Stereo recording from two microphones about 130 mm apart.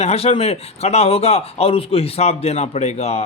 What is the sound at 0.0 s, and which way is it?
A man's voice, 55° left (ahead or behind).